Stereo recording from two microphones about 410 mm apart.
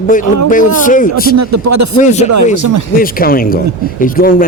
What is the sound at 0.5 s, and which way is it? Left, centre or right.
Speech, centre.